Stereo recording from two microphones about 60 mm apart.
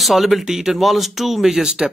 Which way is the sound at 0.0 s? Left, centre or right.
Centre.